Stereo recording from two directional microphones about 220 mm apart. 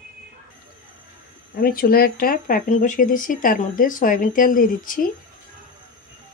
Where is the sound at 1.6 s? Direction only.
45° left (ahead or behind).